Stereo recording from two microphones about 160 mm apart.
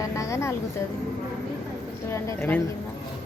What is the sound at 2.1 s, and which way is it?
Speech, 15° left (ahead or behind).